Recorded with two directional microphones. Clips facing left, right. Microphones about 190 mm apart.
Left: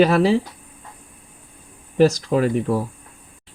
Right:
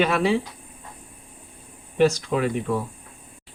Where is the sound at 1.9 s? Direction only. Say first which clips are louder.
Left 4 dB; 40° left (ahead or behind).